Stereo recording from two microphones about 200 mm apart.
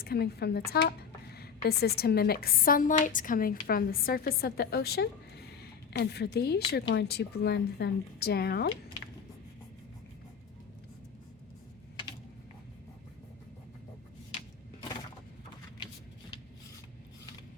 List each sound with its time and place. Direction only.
0.0 s a woman's voice: 50° left (ahead or behind)